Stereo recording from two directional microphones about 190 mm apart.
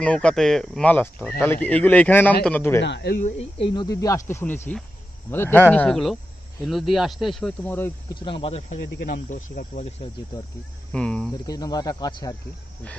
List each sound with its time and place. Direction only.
0.0 s a man's voice: 5° left (ahead or behind)
2.8 s speech: 65° left (ahead or behind)
3.2 s speech: 35° left (ahead or behind)
3.7 s a man's voice: 20° left (ahead or behind)
8.1 s speech: 25° left (ahead or behind)
10.9 s speech: 5° left (ahead or behind)
11.4 s speech: 20° left (ahead or behind)